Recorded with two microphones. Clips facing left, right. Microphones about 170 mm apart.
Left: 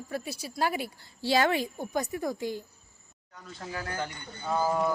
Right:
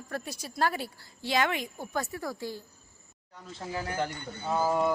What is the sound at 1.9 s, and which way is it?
Speech, 15° left (ahead or behind).